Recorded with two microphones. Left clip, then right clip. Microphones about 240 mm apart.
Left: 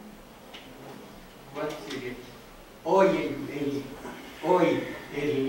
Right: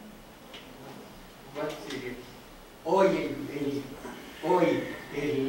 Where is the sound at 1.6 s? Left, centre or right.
Centre.